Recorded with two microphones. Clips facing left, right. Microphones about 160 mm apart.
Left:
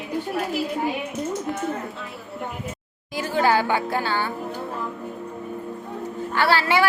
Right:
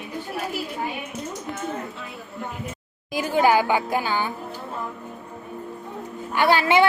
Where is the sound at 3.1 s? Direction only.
15° right (ahead or behind).